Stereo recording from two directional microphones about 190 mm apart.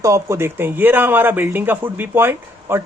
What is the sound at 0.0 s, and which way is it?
A man's voice, 15° right (ahead or behind).